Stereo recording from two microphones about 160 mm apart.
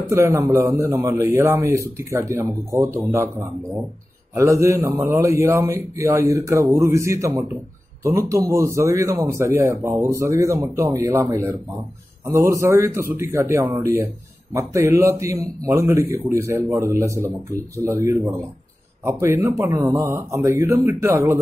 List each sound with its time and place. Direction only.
0.1 s a man's voice: 15° right (ahead or behind)